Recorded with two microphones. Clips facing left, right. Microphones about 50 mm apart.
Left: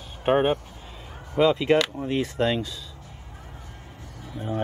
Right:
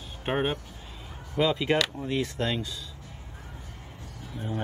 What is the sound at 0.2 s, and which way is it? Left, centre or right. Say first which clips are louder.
Speech: left 7 dB; centre.